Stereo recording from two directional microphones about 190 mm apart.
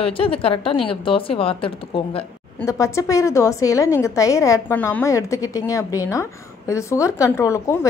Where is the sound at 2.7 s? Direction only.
15° left (ahead or behind).